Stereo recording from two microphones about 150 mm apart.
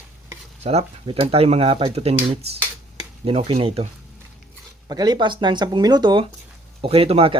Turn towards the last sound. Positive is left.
turn(degrees=-40)  # may be behind; listen again after turning